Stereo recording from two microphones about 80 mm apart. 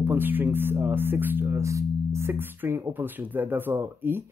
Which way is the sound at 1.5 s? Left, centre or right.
Right.